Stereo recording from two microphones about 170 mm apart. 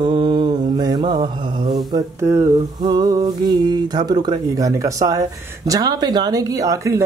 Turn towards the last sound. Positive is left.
turn(degrees=-20)  # may be behind; listen again after turning